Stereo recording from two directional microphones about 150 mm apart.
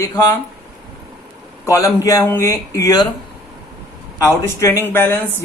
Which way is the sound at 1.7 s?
20° left (ahead or behind).